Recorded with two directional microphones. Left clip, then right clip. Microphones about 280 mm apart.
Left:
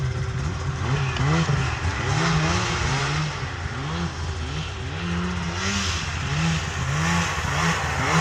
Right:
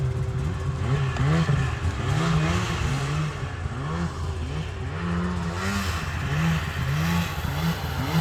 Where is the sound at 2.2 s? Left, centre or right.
Centre.